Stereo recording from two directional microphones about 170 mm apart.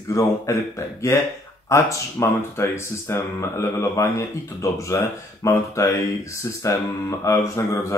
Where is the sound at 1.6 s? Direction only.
15° left (ahead or behind).